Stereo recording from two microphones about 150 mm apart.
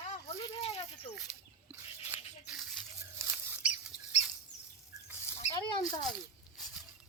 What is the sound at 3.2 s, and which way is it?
Rodents, 10° right (ahead or behind).